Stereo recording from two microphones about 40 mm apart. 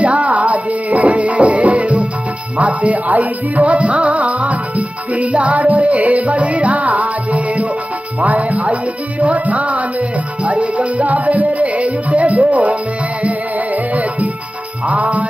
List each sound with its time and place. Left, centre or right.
0.0 s music: right
14.9 s music: right